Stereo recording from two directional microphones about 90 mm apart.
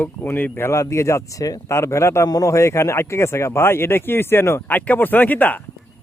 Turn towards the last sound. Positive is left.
turn(degrees=20)  # may be behind; listen again after turning